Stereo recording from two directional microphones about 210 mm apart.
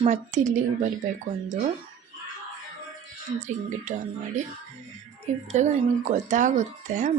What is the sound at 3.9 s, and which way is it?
Speech, 35° right (ahead or behind).